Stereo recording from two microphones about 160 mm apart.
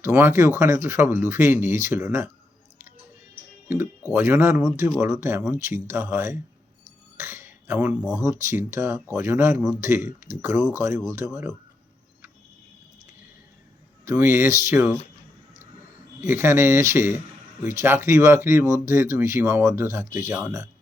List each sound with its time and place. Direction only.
0.0 s speech: 15° right (ahead or behind)
4.1 s speech: 15° right (ahead or behind)
14.0 s speech: 15° right (ahead or behind)
16.2 s speech: 15° right (ahead or behind)